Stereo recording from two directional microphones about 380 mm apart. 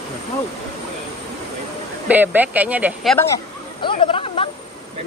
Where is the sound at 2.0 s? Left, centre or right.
Centre.